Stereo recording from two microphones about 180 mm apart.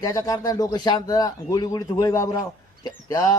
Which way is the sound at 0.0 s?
20° left (ahead or behind).